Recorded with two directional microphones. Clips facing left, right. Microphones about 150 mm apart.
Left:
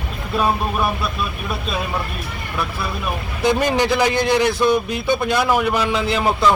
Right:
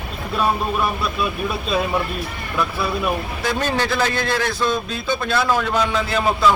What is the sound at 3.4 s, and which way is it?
A man's voice, 15° left (ahead or behind).